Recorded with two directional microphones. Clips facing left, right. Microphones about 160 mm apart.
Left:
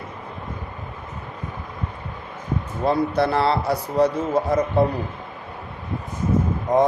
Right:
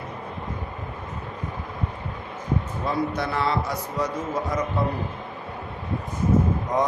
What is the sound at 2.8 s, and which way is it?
A man's voice, 30° left (ahead or behind).